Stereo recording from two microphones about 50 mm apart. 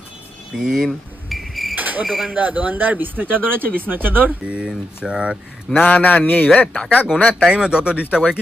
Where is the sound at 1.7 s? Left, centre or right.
Right.